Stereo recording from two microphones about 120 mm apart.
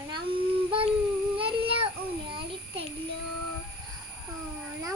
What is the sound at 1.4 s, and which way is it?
Child singing, 50° right (ahead or behind).